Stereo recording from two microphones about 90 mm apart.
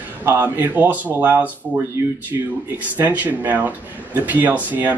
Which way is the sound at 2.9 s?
20° right (ahead or behind).